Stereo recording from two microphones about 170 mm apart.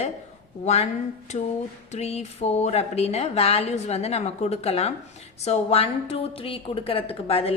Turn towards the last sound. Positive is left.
turn(degrees=35)  # may be behind; listen again after turning